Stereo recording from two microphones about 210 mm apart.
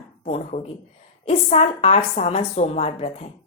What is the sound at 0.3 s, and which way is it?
A woman's voice, 30° left (ahead or behind).